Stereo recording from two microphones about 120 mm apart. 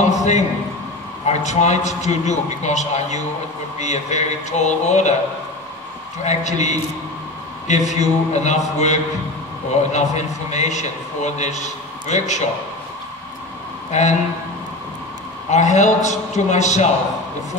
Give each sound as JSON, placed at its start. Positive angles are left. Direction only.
{"t": 0.2, "sound": "a man's voice", "side_deg": 75}
{"t": 6.2, "sound": "a man's voice", "side_deg": 75}
{"t": 13.9, "sound": "a man's voice", "side_deg": 80}
{"t": 15.5, "sound": "a man's voice", "side_deg": 80}